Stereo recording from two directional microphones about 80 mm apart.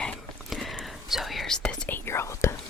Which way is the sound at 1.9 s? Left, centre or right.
Left.